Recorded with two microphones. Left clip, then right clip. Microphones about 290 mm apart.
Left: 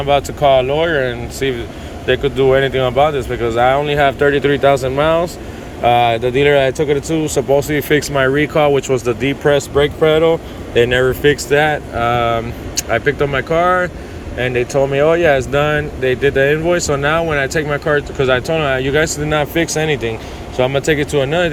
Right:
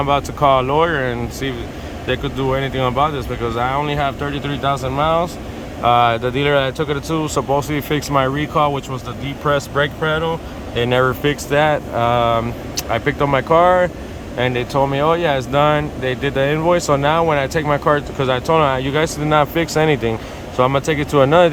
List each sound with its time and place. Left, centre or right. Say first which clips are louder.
0.0 s speech: left 2 dB; centre